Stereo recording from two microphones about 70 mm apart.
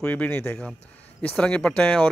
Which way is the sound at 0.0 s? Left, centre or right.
Centre.